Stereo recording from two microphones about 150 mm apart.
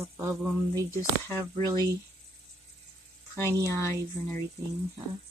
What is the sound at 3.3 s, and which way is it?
Speech, 20° right (ahead or behind).